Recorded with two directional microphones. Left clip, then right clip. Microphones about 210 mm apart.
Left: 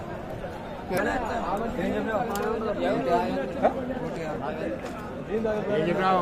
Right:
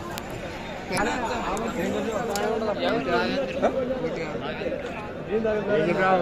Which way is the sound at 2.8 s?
40° left (ahead or behind).